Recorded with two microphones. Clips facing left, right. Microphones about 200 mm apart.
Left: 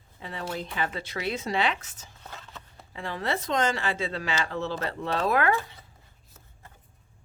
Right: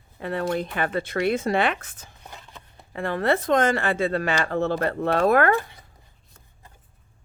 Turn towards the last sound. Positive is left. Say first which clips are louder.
# right 6 dB
turn(degrees=-55)  # may be behind; listen again after turning